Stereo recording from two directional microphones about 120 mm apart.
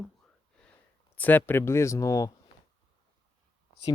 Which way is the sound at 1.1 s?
15° left (ahead or behind).